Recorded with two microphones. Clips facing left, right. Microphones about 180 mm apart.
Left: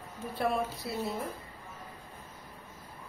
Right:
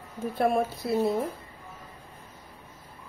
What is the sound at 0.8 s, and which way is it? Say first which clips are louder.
Speech: right 10 dB; 55° right (ahead or behind).